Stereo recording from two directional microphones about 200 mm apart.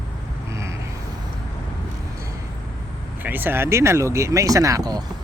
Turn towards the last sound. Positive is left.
turn(degrees=-20)  # may be behind; listen again after turning